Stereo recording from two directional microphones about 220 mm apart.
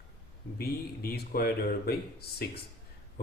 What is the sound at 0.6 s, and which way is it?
Speech, 45° left (ahead or behind).